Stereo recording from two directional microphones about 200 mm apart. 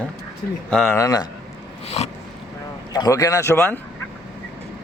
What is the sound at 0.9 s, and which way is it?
Speech, 20° left (ahead or behind).